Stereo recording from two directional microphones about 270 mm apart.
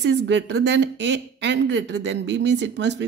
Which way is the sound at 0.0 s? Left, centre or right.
Right.